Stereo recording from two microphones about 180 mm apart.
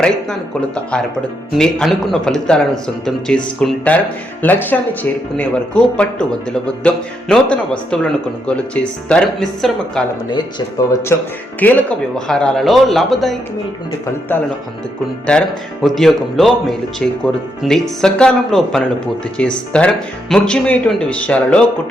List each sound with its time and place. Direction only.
1.5 s speech: 5° left (ahead or behind)
10.2 s speech: 20° left (ahead or behind); by 13.3 s centre (ahead or behind)
15.3 s speech: centre (ahead or behind)